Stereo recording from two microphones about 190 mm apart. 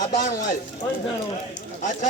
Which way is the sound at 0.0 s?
45° left (ahead or behind).